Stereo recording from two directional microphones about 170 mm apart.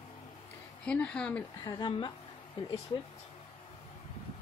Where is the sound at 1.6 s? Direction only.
25° left (ahead or behind).